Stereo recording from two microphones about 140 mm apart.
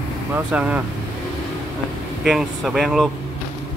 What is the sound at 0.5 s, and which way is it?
Speech, 10° right (ahead or behind).